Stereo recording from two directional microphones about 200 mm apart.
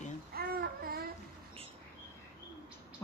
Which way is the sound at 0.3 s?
50° right (ahead or behind).